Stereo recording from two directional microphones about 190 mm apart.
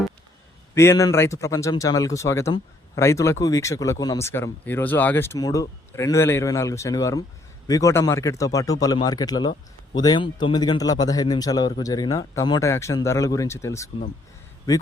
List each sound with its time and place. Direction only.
0.7 s a man's voice: 15° left (ahead or behind)